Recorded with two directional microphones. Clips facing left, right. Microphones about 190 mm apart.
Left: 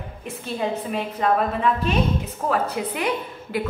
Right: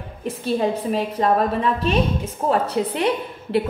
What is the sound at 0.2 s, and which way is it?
A woman's voice, 35° right (ahead or behind).